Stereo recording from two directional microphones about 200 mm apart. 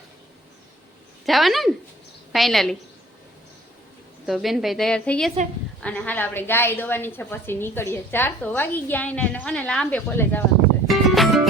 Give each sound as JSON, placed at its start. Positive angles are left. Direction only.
{"t": 1.2, "sound": "speech", "side_deg": 0}
{"t": 4.3, "sound": "a woman's voice", "side_deg": 0}
{"t": 10.8, "sound": "music", "side_deg": 0}